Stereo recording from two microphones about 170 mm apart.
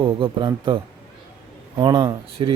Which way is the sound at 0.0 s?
30° right (ahead or behind).